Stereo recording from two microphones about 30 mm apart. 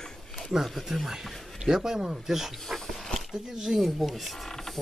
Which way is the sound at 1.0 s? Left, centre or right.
Centre.